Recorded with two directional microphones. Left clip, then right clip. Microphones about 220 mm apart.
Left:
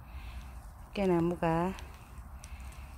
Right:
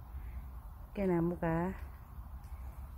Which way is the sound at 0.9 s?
10° left (ahead or behind).